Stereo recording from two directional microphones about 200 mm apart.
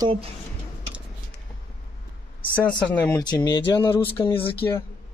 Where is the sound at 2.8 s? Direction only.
10° left (ahead or behind).